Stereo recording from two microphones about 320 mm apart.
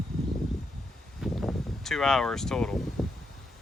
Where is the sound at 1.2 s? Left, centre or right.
Centre.